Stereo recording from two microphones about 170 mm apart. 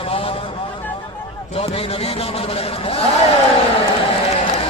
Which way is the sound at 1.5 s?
35° left (ahead or behind).